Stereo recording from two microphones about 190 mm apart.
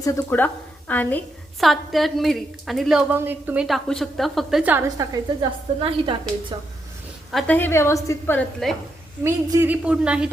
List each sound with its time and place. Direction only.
0.0 s a woman's voice: 15° left (ahead or behind); by 5.0 s 10° right (ahead or behind)
5.4 s a woman's voice: 25° right (ahead or behind)
7.3 s a woman's voice: 5° left (ahead or behind)
9.2 s a woman's voice: 15° right (ahead or behind)